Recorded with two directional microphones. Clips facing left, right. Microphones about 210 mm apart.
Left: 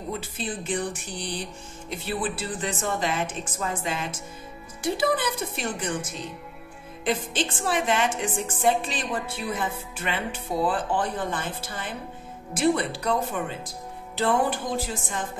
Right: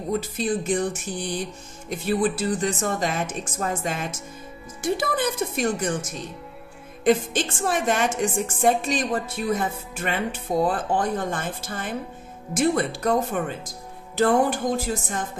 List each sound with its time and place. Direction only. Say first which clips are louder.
0.2 s a woman's voice: right 7 dB; 45° right (ahead or behind)
7.1 s a woman's voice: right 6 dB; 45° right (ahead or behind)